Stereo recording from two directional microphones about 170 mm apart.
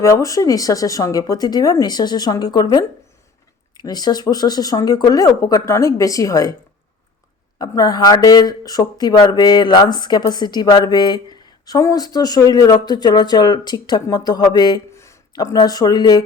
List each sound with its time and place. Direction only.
0.0 s speech: 20° left (ahead or behind)
7.6 s speech: 20° left (ahead or behind)